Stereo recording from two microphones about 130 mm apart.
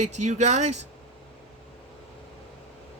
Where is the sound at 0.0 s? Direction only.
65° right (ahead or behind).